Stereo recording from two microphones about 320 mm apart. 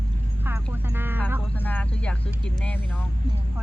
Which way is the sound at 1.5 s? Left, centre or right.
Centre.